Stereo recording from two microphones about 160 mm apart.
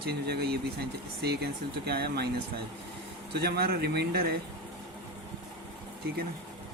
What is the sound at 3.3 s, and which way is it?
Speech, 80° right.